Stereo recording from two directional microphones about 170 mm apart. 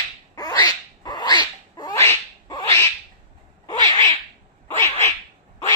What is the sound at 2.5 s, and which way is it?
Cat, 15° left (ahead or behind).